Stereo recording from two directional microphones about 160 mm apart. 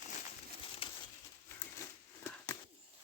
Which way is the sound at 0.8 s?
35° left (ahead or behind).